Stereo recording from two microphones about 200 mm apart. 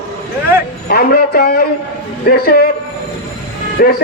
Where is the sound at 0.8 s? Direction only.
50° left (ahead or behind).